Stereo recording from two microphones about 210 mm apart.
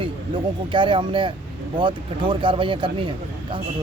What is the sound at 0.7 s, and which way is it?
Speech, 25° right (ahead or behind).